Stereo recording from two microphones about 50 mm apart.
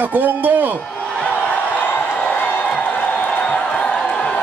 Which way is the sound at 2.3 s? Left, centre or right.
Left.